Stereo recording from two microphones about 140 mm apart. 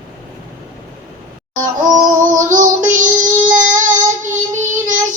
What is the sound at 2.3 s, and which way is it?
Child singing, 65° right (ahead or behind).